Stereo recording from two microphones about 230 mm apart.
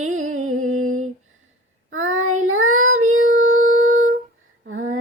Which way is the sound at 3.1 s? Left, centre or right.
Right.